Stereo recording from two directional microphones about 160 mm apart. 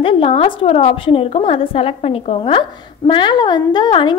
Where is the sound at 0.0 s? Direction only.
35° left (ahead or behind).